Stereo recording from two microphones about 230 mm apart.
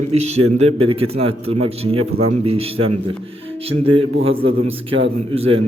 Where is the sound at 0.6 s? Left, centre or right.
Right.